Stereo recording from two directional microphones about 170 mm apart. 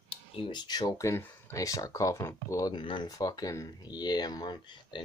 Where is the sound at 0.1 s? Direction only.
30° left (ahead or behind).